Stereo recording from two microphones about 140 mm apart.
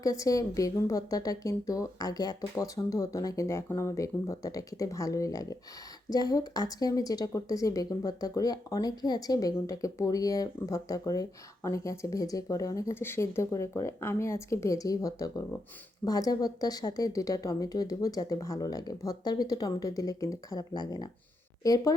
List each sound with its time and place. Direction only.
0.0 s speech: 25° left (ahead or behind)